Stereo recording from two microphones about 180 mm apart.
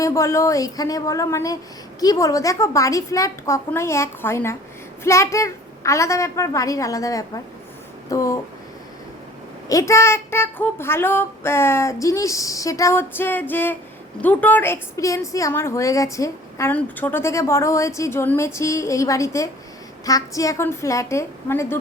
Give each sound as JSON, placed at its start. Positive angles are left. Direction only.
{"t": 0.0, "sound": "a woman's voice", "side_deg": 15}
{"t": 9.6, "sound": "a woman's voice", "side_deg": 15}